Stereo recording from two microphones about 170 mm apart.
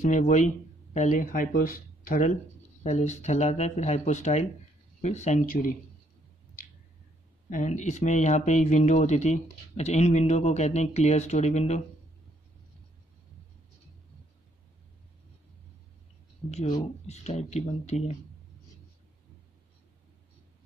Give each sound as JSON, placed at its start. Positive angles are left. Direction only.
{"t": 0.0, "sound": "speech", "side_deg": 45}
{"t": 2.8, "sound": "speech", "side_deg": 40}
{"t": 7.4, "sound": "speech", "side_deg": 45}
{"t": 17.0, "sound": "speech", "side_deg": 40}